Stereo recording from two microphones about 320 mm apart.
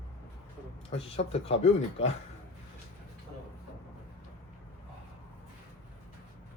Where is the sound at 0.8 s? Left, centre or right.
Centre.